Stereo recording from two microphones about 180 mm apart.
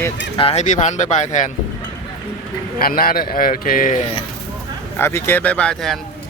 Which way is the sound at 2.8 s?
55° left (ahead or behind).